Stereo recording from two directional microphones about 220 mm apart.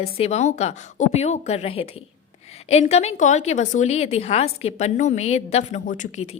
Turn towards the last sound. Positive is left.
turn(degrees=35)  # may be behind; listen again after turning